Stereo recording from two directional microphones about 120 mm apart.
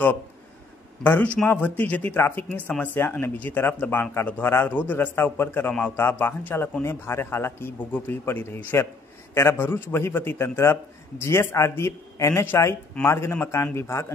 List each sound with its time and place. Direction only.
1.0 s a man's voice: 15° left (ahead or behind)